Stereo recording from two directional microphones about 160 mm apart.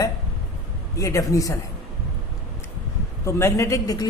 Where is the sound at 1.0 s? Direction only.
20° left (ahead or behind).